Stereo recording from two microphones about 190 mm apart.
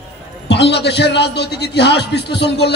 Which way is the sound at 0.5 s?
65° left (ahead or behind).